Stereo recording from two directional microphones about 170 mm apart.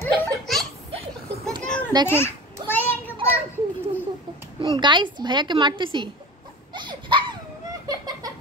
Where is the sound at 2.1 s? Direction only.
15° left (ahead or behind).